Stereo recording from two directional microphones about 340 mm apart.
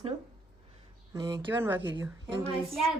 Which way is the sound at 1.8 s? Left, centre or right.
Right.